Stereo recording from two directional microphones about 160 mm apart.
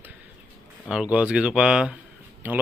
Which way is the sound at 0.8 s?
5° right (ahead or behind).